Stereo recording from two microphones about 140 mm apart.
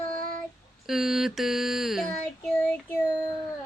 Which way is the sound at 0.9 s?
5° right (ahead or behind).